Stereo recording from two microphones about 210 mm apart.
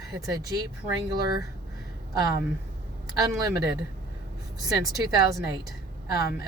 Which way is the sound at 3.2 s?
20° right (ahead or behind).